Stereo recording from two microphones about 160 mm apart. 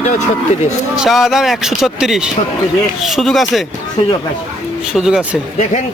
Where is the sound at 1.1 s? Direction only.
Centre (ahead or behind).